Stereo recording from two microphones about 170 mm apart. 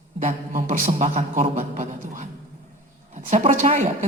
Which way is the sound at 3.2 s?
45° right (ahead or behind).